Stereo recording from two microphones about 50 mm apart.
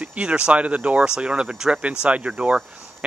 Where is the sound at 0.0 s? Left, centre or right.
Right.